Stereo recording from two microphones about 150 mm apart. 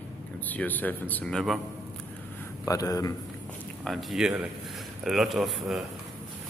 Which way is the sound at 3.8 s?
Centre (ahead or behind).